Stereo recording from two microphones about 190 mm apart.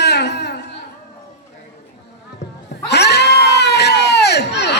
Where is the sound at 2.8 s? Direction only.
60° left (ahead or behind).